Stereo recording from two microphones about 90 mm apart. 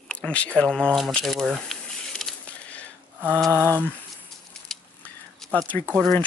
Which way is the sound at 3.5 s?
30° right (ahead or behind).